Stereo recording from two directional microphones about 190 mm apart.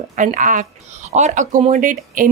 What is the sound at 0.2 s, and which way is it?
Speech, 40° right (ahead or behind).